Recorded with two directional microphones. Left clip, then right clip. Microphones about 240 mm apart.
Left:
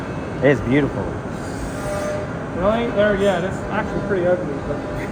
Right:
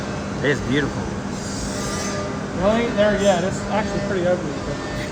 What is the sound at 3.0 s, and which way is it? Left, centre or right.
Speech, right.